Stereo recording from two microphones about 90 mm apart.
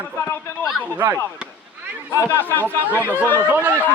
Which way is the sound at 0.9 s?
20° right (ahead or behind).